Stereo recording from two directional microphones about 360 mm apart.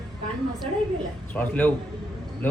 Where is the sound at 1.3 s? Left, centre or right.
Centre.